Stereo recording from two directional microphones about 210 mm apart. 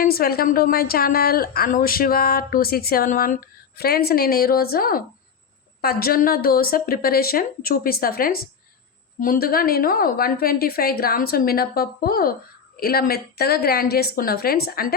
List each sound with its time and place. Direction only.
0.0 s a woman's voice: 45° left (ahead or behind)